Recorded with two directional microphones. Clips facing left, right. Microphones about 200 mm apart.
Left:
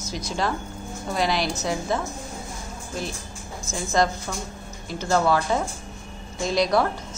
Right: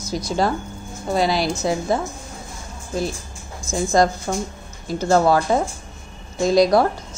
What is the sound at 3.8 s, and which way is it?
Speech, 40° right (ahead or behind).